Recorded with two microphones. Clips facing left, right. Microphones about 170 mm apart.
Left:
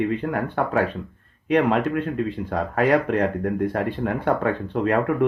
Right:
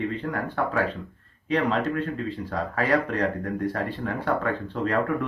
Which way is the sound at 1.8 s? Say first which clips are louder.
Left 4 dB; 55° left (ahead or behind).